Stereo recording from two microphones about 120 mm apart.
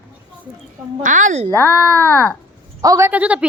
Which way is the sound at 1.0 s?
90° right.